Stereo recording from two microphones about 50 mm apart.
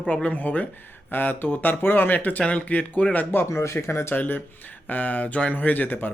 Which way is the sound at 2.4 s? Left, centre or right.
Left.